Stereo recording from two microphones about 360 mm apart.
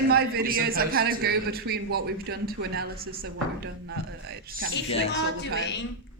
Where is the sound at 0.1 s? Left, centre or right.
Right.